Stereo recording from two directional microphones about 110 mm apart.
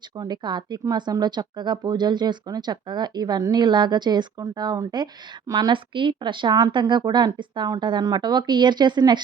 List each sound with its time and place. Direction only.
0.2 s speech: 40° right (ahead or behind)